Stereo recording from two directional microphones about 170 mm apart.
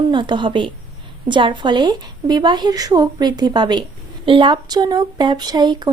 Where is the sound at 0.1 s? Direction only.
30° right (ahead or behind).